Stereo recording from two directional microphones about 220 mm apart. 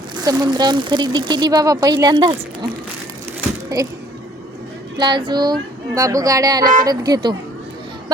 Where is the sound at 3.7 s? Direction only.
15° right (ahead or behind).